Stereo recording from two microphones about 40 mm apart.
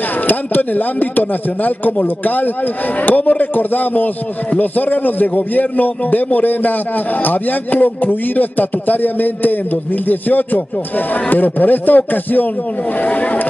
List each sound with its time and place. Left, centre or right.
0.3 s speech: left